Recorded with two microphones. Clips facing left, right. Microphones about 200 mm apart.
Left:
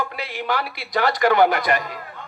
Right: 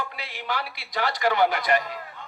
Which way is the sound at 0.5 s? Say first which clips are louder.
Left 6 dB; 90° left.